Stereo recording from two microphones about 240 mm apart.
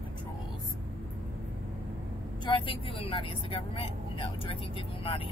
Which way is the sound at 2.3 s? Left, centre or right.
Centre.